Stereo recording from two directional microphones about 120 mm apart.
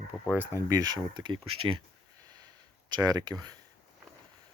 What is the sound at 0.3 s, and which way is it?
Speech, 25° right (ahead or behind).